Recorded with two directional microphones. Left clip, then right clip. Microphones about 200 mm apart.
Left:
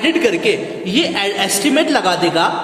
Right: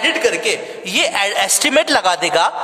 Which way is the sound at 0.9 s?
40° right (ahead or behind).